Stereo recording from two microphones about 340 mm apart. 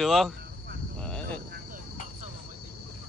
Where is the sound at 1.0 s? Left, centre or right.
Centre.